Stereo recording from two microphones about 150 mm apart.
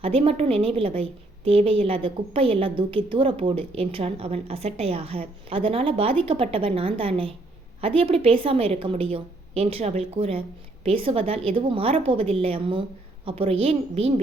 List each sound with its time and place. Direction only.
0.0 s a woman's voice: 40° right (ahead or behind)